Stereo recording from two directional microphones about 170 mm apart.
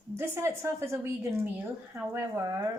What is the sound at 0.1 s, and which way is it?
Speech, 15° right (ahead or behind).